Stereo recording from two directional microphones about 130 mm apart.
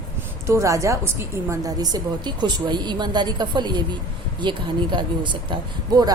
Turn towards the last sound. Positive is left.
turn(degrees=-35)  # may be behind; listen again after turning